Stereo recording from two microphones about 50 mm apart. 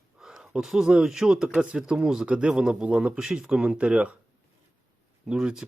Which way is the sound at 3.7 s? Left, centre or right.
Right.